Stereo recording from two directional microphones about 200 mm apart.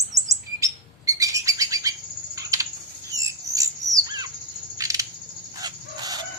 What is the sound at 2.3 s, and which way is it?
Typing, 15° right (ahead or behind).